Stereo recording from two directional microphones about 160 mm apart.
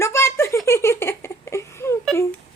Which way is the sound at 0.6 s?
15° left (ahead or behind).